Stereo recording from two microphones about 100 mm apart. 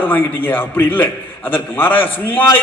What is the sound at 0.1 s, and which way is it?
A man's voice, 20° left (ahead or behind).